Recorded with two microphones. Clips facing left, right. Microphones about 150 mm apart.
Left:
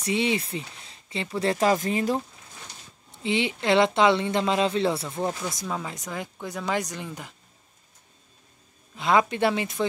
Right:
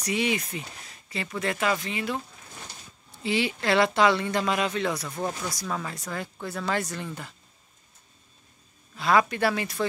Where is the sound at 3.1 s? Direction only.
20° left (ahead or behind).